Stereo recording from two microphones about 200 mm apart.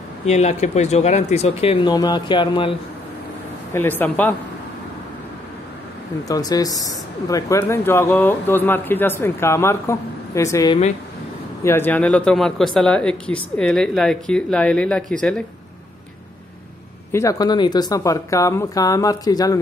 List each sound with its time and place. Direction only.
0.3 s speech: 35° left (ahead or behind)
3.7 s speech: 10° left (ahead or behind)
6.2 s speech: 20° left (ahead or behind); by 15.4 s 5° left (ahead or behind)
17.1 s speech: 15° left (ahead or behind)